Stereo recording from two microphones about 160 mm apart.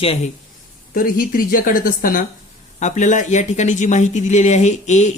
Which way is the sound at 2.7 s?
50° left (ahead or behind).